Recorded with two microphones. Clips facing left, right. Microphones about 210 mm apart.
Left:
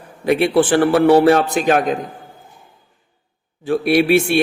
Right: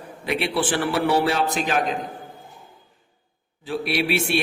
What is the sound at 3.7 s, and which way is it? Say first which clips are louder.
Speech: left 9 dB; 50° left (ahead or behind).